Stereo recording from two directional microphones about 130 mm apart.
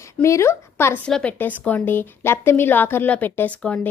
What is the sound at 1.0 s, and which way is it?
A woman's voice, 10° left (ahead or behind).